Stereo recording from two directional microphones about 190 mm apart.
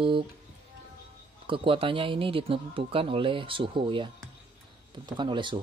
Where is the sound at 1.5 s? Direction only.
25° right (ahead or behind).